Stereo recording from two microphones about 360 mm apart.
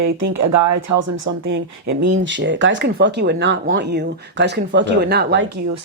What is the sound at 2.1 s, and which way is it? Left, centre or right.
Speech, right.